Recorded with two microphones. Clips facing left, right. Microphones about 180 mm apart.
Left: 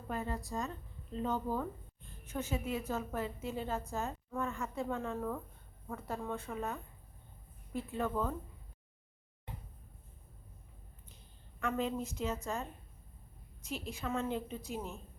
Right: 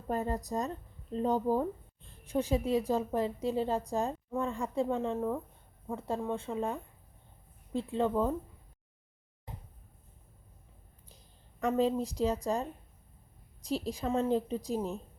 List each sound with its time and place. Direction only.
0.1 s a woman's voice: 40° right (ahead or behind)
11.6 s a woman's voice: 35° right (ahead or behind)